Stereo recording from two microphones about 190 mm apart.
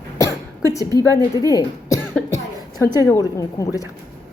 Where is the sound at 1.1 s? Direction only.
20° left (ahead or behind).